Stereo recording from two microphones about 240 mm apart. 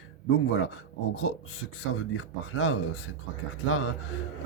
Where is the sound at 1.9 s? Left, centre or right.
Left.